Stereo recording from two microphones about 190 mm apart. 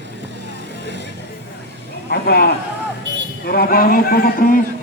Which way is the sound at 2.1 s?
55° left (ahead or behind).